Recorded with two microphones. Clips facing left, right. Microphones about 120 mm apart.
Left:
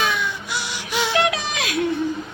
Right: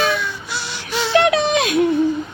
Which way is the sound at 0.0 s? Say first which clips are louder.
Right 3 dB; 15° left (ahead or behind).